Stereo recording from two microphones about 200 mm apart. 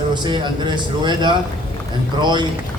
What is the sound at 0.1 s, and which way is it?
Speech, 20° right (ahead or behind).